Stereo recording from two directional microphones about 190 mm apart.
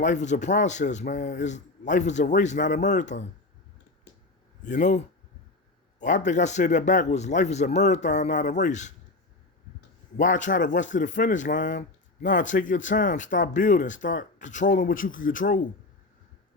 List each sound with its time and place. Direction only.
0.0 s a man's voice: 40° left (ahead or behind)
4.6 s a man's voice: 40° left (ahead or behind)
10.2 s speech: 40° left (ahead or behind)